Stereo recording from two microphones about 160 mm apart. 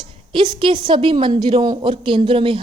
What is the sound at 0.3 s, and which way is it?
A woman's voice, 30° right (ahead or behind).